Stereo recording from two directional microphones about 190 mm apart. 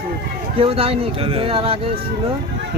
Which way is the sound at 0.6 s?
30° right (ahead or behind).